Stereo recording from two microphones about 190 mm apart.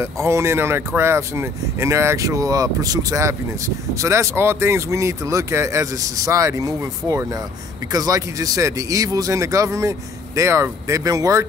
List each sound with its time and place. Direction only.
0.0 s speech: 15° right (ahead or behind)